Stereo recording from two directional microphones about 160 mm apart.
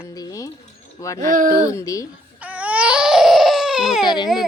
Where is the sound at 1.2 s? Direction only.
55° right (ahead or behind).